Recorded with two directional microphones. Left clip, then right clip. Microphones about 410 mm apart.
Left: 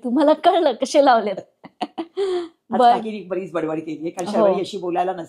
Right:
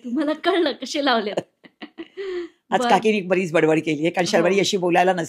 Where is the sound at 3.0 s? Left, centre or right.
Right.